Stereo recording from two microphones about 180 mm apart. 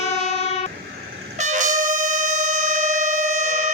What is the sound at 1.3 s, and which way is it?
Brass instrument, 45° right (ahead or behind).